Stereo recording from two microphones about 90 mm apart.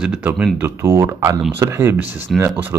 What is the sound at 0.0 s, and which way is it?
Speech, 10° right (ahead or behind).